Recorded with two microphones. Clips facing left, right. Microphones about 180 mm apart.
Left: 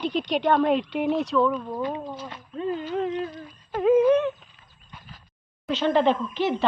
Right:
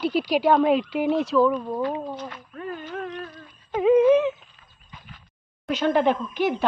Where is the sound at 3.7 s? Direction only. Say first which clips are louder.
Right 2 dB; centre (ahead or behind).